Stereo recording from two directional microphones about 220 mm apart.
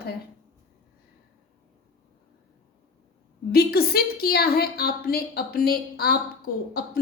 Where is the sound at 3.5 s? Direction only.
45° left (ahead or behind).